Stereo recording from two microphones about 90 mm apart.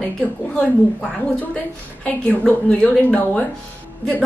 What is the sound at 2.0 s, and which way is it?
A woman's voice, 15° left (ahead or behind).